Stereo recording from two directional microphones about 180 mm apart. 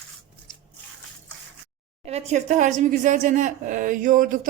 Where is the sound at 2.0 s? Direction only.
40° right (ahead or behind).